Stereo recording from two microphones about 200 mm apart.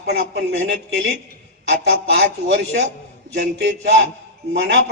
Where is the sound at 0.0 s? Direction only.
55° right (ahead or behind).